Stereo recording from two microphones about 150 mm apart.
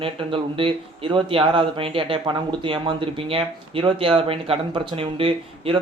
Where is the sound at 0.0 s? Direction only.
35° right (ahead or behind).